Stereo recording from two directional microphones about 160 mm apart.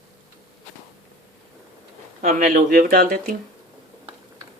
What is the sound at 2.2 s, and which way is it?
Speech, 60° right (ahead or behind).